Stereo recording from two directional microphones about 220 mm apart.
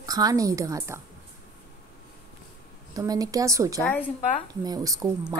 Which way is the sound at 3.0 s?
15° right (ahead or behind).